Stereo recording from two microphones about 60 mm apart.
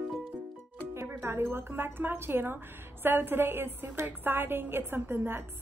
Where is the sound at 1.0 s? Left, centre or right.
Right.